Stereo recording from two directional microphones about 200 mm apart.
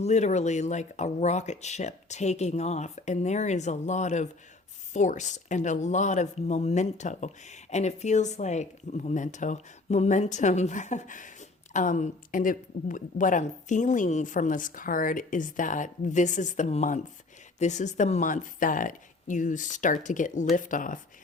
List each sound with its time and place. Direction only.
0.0 s speech: 35° left (ahead or behind)